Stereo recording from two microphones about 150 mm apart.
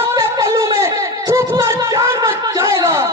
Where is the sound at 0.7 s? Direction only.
20° right (ahead or behind).